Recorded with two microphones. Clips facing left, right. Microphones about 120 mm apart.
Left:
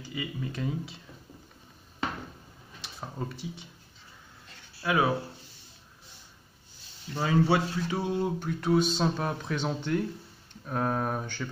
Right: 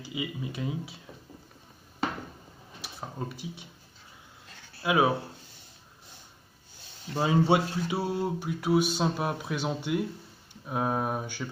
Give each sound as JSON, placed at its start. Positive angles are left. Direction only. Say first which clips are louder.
{"t": 0.0, "sound": "speech", "louder": "right 1 dB", "side_deg": -15}
{"t": 2.8, "sound": "speech", "louder": "even", "side_deg": -5}
{"t": 4.8, "sound": "speech", "louder": "right 2 dB", "side_deg": -15}
{"t": 7.2, "sound": "speech", "louder": "right 1 dB", "side_deg": -20}
{"t": 7.8, "sound": "speech", "louder": "even", "side_deg": -10}